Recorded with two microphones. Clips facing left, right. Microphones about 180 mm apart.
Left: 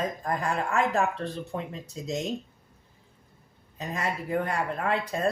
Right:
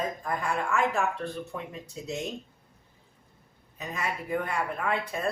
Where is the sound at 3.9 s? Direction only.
40° left (ahead or behind).